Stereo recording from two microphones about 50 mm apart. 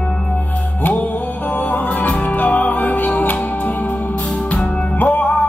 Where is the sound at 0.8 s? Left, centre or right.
Left.